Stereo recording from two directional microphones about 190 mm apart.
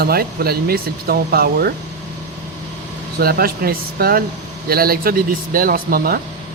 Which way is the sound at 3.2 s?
50° right (ahead or behind).